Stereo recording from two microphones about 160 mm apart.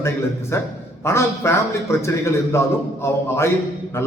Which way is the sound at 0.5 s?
15° left (ahead or behind).